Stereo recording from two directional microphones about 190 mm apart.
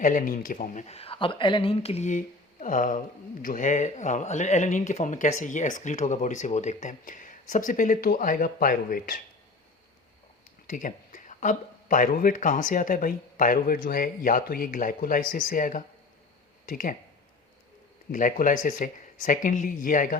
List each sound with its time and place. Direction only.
0.0 s speech: 45° left (ahead or behind)
10.7 s speech: 45° left (ahead or behind)
18.1 s speech: 45° left (ahead or behind)